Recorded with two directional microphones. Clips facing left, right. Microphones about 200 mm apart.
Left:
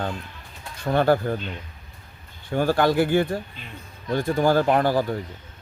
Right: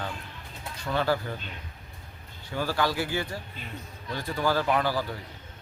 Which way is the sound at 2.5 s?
55° left (ahead or behind).